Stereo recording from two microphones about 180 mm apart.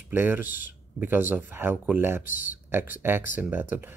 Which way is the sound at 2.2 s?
50° left (ahead or behind).